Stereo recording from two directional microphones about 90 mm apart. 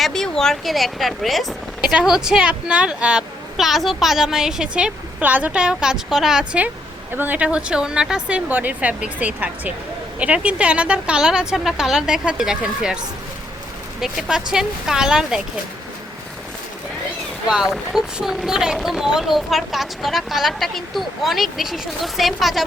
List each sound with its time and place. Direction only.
0.0 s a woman's voice: 5° left (ahead or behind)
17.5 s speech: 5° right (ahead or behind)